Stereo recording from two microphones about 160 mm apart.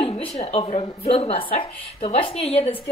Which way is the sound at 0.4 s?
40° left (ahead or behind).